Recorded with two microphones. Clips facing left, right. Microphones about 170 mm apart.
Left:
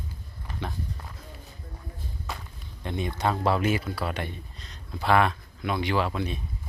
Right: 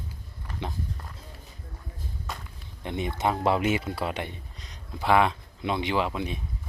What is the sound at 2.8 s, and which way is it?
Speech, 20° right (ahead or behind).